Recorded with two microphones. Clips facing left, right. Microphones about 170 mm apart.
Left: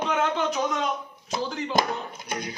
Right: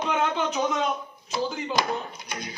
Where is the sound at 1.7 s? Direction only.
50° left (ahead or behind).